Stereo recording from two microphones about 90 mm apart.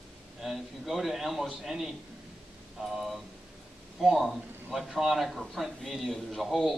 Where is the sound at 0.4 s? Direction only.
Centre (ahead or behind).